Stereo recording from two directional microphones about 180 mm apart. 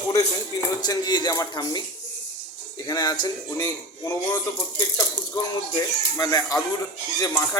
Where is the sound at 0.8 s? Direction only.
20° left (ahead or behind).